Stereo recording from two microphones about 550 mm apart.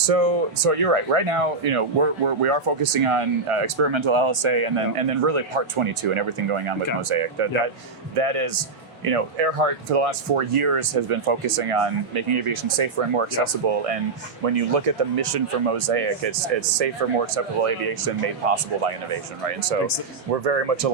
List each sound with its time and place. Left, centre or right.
0.1 s speech: right